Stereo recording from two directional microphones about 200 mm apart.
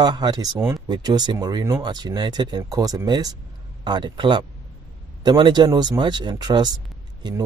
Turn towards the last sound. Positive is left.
turn(degrees=-20)  # may be behind; listen again after turning